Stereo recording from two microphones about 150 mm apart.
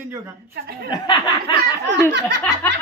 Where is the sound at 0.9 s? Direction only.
30° left (ahead or behind).